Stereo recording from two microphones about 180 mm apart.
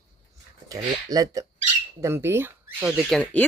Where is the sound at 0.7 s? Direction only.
20° right (ahead or behind).